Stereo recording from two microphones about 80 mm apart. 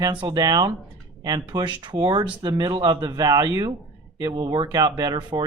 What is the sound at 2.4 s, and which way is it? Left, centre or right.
Speech, right.